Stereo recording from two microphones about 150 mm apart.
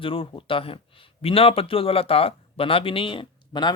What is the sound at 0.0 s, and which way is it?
Speech, 35° left (ahead or behind).